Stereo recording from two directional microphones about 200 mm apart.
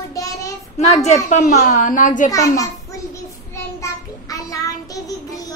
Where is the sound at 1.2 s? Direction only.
40° left (ahead or behind).